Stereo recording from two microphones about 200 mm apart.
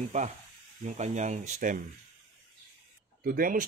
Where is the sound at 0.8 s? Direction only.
35° right (ahead or behind).